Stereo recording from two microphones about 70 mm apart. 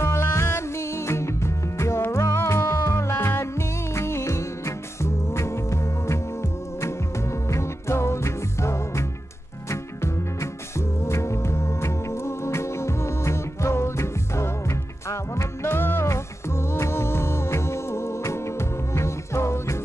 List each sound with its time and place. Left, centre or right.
0.0 s music: left